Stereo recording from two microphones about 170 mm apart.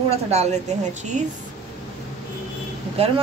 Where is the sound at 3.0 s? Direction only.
35° right (ahead or behind).